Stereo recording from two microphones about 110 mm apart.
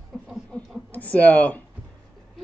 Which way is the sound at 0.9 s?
15° left (ahead or behind).